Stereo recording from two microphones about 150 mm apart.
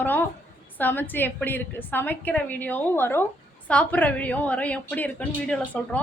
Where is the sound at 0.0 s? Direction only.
10° left (ahead or behind).